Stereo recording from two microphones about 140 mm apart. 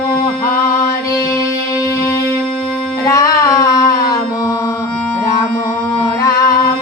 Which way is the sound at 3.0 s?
25° left (ahead or behind).